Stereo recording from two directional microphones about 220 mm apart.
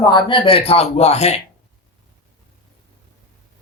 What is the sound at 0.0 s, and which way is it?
A woman's voice, 20° left (ahead or behind).